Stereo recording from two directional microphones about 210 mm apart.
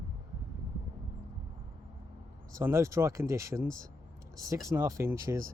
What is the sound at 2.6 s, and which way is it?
Speech, 15° right (ahead or behind).